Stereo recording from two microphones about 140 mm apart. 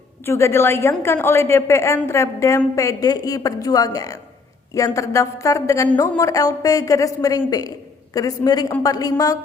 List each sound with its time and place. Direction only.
0.3 s a woman's voice: 20° left (ahead or behind)